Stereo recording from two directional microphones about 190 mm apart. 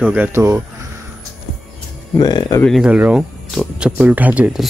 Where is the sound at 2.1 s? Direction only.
20° left (ahead or behind).